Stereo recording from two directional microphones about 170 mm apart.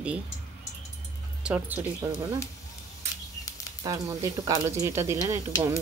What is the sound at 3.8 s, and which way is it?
Speech, 20° right (ahead or behind).